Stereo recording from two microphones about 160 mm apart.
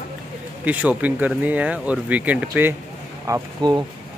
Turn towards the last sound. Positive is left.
turn(degrees=-20)  # may be behind; listen again after turning